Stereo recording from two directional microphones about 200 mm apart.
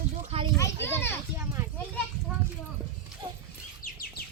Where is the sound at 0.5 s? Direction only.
15° left (ahead or behind).